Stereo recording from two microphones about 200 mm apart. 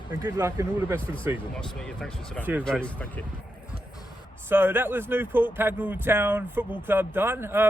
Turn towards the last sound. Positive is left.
turn(degrees=-10)  # may be behind; listen again after turning